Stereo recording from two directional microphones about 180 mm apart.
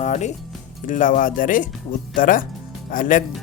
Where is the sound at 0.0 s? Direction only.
40° left (ahead or behind).